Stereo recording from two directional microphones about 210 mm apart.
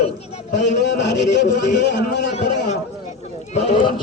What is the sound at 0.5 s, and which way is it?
A man's voice, 55° left (ahead or behind).